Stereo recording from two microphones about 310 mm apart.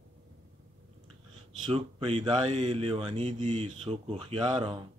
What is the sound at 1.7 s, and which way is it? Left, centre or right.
Speech, centre.